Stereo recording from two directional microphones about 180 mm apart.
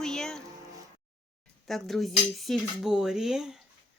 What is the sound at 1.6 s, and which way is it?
Speech, centre (ahead or behind).